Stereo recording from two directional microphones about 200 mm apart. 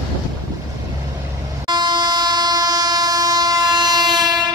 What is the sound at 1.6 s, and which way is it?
Train, 20° right (ahead or behind).